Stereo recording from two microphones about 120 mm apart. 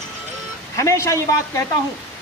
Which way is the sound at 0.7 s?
25° left (ahead or behind).